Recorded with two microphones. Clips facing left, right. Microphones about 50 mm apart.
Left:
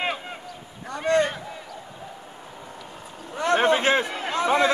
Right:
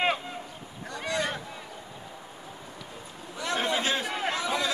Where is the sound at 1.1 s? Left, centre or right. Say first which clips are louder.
Left 10 dB; left.